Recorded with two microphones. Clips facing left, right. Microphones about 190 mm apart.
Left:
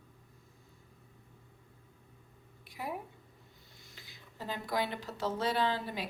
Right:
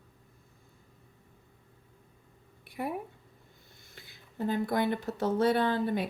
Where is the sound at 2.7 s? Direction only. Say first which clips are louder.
Right 5 dB; 60° right (ahead or behind).